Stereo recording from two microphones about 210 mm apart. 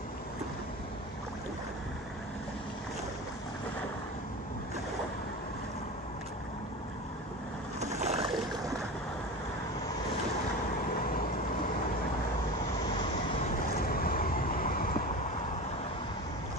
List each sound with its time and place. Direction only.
7.8 s boat: 30° right (ahead or behind)
12.9 s vehicle: 25° left (ahead or behind)
13.7 s vehicle: 45° left (ahead or behind)